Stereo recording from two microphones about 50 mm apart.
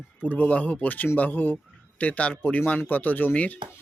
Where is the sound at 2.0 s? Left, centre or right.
Left.